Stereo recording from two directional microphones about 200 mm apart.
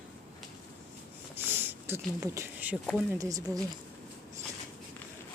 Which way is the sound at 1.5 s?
10° right (ahead or behind).